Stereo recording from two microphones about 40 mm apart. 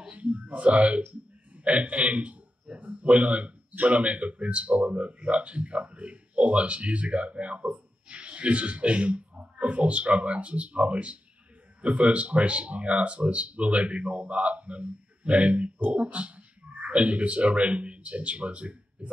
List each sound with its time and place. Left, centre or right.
0.1 s a man's voice: right